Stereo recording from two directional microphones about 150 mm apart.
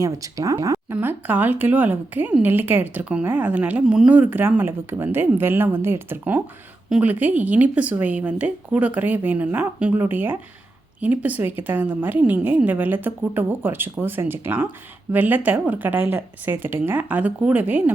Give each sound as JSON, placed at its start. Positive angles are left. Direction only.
{"t": 0.0, "sound": "a woman's voice", "side_deg": -20}